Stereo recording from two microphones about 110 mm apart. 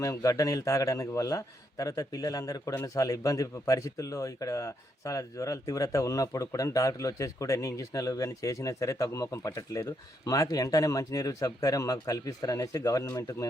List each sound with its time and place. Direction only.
0.0 s a man's voice: 30° left (ahead or behind)